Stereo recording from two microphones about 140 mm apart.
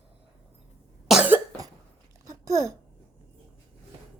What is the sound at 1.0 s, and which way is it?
Cough, 10° right (ahead or behind).